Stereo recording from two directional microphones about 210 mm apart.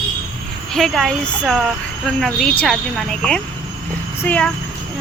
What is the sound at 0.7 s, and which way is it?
A child's voice, centre (ahead or behind).